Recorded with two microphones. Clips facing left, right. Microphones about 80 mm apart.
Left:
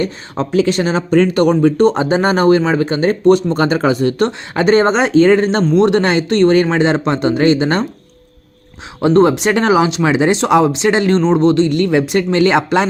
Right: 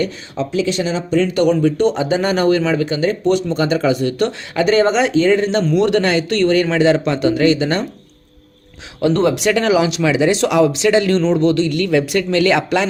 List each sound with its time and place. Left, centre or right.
0.3 s speech: left
9.0 s speech: left